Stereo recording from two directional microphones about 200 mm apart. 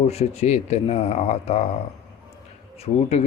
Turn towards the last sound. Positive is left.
turn(degrees=30)  # may be behind; listen again after turning